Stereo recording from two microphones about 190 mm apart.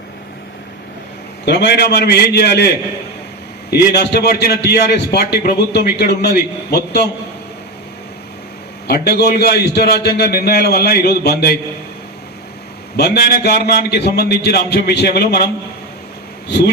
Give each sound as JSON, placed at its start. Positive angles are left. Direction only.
{"t": 1.5, "sound": "a man's voice", "side_deg": 60}
{"t": 8.9, "sound": "a man's voice", "side_deg": 60}
{"t": 13.0, "sound": "a man's voice", "side_deg": 55}
{"t": 16.5, "sound": "a man's voice", "side_deg": 60}